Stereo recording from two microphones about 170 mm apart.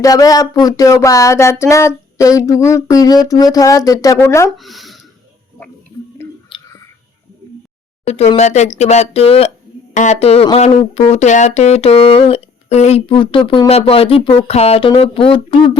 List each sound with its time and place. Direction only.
0.0 s speech: 20° left (ahead or behind)
4.5 s speech: centre (ahead or behind)
6.2 s chewing: 15° left (ahead or behind)
8.0 s speech: 35° left (ahead or behind)